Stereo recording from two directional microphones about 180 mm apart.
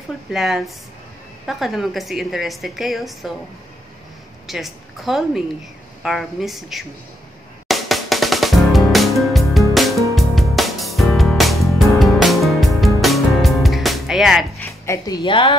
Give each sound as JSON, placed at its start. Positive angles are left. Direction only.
{"t": 0.3, "sound": "a woman's voice", "side_deg": 0}
{"t": 4.5, "sound": "a woman's voice", "side_deg": 0}
{"t": 7.6, "sound": "music", "side_deg": 0}
{"t": 14.6, "sound": "music", "side_deg": 15}
{"t": 15.2, "sound": "a woman's voice", "side_deg": 30}